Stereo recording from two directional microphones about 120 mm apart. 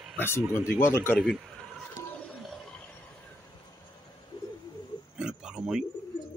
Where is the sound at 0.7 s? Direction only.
20° left (ahead or behind).